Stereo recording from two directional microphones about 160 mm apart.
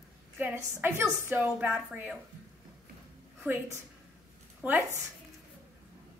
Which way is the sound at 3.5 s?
10° right (ahead or behind).